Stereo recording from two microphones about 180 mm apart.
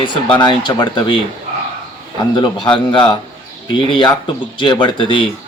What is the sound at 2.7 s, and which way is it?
Speech, 25° left (ahead or behind).